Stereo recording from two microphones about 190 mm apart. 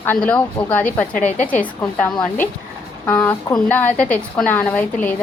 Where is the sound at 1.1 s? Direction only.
40° left (ahead or behind).